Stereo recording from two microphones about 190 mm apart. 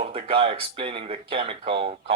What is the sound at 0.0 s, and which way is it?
Speech, 30° right (ahead or behind).